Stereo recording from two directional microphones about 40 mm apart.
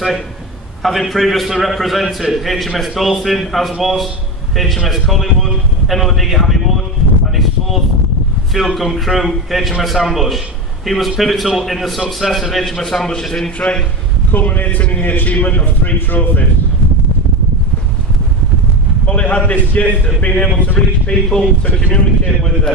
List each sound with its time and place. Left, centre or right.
0.8 s a man's voice: centre
8.5 s a man's voice: centre
14.3 s a man's voice: left
14.8 s a man's voice: left
19.0 s a man's voice: left